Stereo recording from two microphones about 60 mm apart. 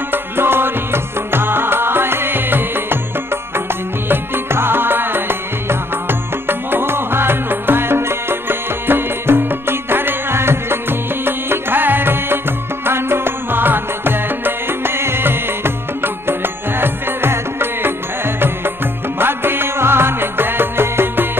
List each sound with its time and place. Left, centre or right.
0.1 s music: right